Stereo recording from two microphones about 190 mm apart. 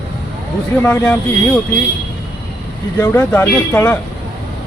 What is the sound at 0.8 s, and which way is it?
Speech, 10° left (ahead or behind).